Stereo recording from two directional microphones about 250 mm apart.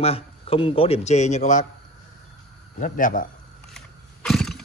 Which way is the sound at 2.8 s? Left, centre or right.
Left.